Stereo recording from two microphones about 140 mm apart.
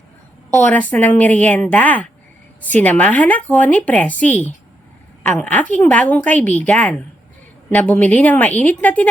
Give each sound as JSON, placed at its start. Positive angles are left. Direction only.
{"t": 0.5, "sound": "speech", "side_deg": 10}